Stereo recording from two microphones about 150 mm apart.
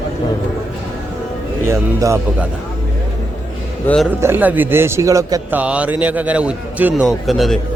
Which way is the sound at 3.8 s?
10° left (ahead or behind).